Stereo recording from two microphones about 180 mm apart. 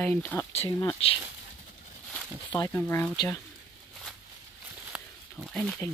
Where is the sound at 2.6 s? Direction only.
15° left (ahead or behind).